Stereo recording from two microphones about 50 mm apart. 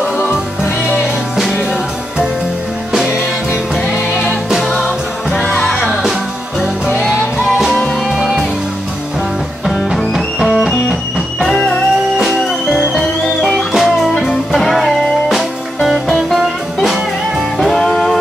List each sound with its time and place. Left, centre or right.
4.8 s music: left
7.1 s music: centre
9.9 s music: centre
12.2 s music: centre